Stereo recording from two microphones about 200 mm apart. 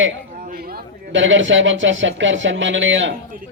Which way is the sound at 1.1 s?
70° right (ahead or behind).